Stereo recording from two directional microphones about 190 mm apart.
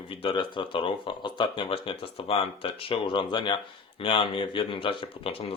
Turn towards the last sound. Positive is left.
turn(degrees=30)  # may be behind; listen again after turning